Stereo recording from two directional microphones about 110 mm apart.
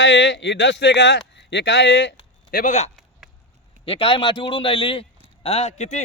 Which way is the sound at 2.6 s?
90° left.